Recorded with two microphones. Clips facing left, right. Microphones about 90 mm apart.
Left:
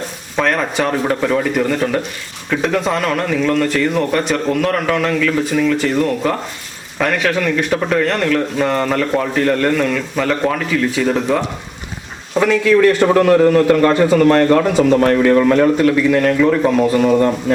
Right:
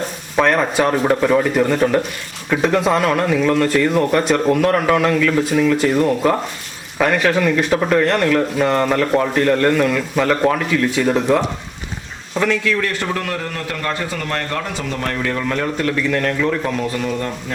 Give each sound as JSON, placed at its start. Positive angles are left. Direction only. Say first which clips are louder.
{"t": 0.3, "sound": "speech", "louder": "right 1 dB", "side_deg": -5}
{"t": 12.3, "sound": "a man's voice", "louder": "left 6 dB", "side_deg": 10}
{"t": 15.4, "sound": "a man's voice", "louder": "left 8 dB", "side_deg": 15}